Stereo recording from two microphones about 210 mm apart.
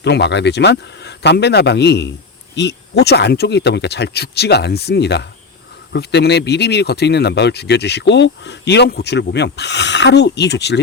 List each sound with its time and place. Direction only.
0.0 s speech: 55° left (ahead or behind)